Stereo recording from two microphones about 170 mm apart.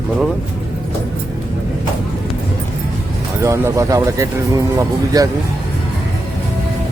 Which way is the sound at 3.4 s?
15° right (ahead or behind).